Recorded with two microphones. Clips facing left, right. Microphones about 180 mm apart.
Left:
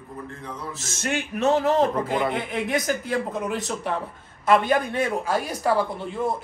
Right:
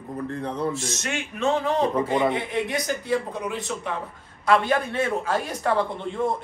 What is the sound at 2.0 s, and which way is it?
Speech, 5° left (ahead or behind).